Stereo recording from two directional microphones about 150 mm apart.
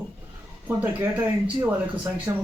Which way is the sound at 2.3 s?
20° right (ahead or behind).